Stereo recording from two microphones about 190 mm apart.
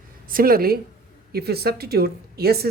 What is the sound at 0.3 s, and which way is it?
A woman's voice, 50° right (ahead or behind).